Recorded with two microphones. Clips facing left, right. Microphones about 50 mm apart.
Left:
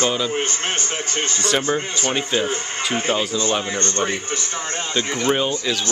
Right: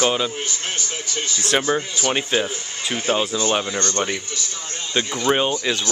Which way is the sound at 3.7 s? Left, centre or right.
Left.